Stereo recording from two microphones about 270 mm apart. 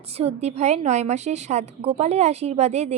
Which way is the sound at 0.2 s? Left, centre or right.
Right.